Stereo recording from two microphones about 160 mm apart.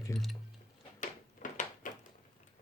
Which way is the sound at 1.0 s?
55° left (ahead or behind).